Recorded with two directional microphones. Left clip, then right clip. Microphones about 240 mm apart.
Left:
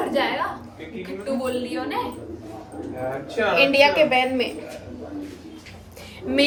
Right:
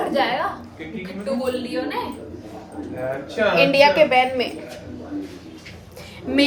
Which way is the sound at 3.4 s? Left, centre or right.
Centre.